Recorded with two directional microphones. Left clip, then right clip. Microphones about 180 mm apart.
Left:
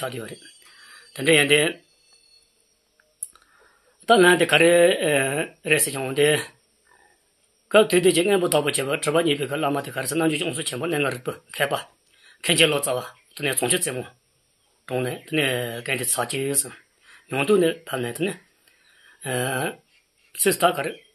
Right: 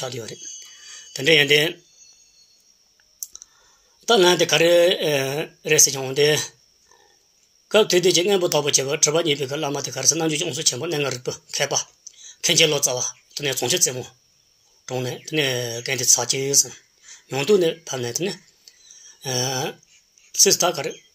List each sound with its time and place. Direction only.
0.0 s speech: 35° right (ahead or behind)
4.0 s speech: 35° right (ahead or behind)
7.6 s speech: 35° right (ahead or behind)